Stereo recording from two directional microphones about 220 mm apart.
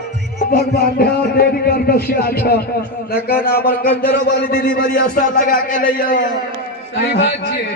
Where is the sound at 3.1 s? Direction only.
45° left (ahead or behind).